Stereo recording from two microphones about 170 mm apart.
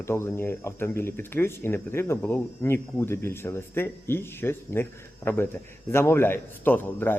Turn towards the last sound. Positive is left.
turn(degrees=10)  # may be behind; listen again after turning